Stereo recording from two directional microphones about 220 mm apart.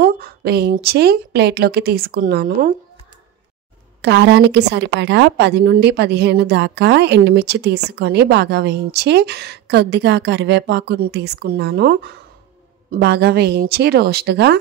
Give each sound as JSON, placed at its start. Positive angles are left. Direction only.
{"t": 0.0, "sound": "speech", "side_deg": -45}
{"t": 4.0, "sound": "speech", "side_deg": -50}